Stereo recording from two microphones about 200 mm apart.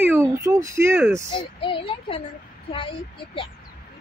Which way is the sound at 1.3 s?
25° left (ahead or behind).